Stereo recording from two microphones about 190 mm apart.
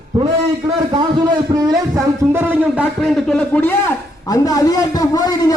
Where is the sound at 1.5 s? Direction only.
20° right (ahead or behind); by 3.7 s 5° left (ahead or behind).